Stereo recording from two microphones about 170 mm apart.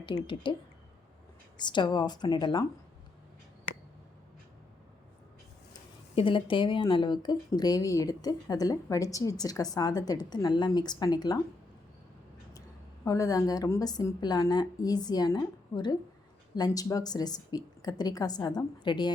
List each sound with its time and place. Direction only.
0.0 s speech: 25° left (ahead or behind)
1.5 s speech: 25° left (ahead or behind)
6.1 s speech: 30° left (ahead or behind)
13.1 s speech: 20° left (ahead or behind)